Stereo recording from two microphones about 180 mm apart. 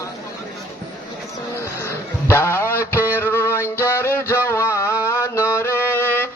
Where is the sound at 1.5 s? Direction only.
15° left (ahead or behind).